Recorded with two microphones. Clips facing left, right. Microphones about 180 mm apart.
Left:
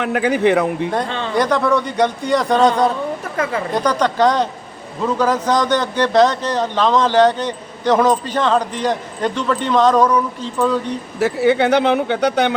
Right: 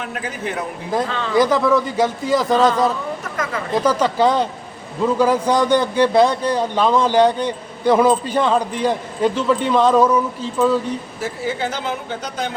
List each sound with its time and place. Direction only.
0.0 s speech: 70° left (ahead or behind)
1.0 s speech: 30° left (ahead or behind)
1.4 s a man's voice: 5° right (ahead or behind)
11.2 s speech: 70° left (ahead or behind)